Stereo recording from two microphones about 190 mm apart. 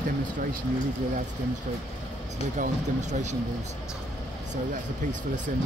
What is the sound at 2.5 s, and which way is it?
Speech, 40° right (ahead or behind).